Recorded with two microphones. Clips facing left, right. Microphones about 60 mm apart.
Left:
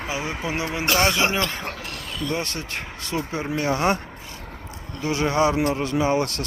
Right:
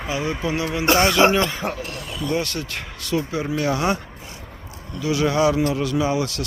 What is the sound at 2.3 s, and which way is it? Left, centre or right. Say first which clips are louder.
Speech: right 3 dB; left.